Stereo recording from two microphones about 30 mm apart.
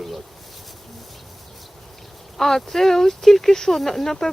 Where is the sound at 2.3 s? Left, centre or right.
Centre.